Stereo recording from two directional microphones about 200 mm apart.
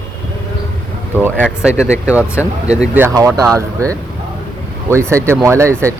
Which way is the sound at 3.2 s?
15° right (ahead or behind).